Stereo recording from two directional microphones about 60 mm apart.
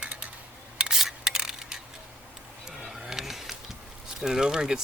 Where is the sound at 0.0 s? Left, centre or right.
Centre.